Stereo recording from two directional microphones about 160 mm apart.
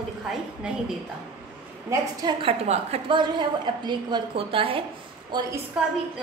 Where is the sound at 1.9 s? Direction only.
25° right (ahead or behind).